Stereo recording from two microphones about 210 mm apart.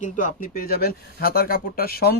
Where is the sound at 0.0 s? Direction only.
40° left (ahead or behind).